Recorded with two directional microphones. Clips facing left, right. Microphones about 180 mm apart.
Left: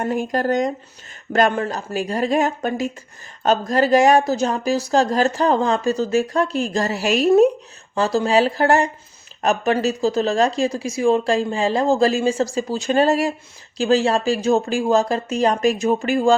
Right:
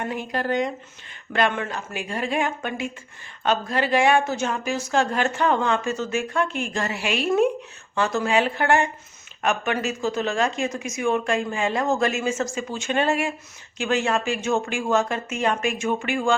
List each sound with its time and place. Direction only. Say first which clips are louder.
0.0 s speech: left 6 dB; 45° left (ahead or behind)